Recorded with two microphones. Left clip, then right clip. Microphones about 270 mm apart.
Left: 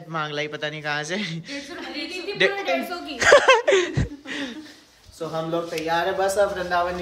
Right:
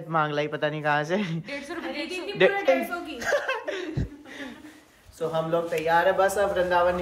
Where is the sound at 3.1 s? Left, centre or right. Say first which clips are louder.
Left 13 dB; left.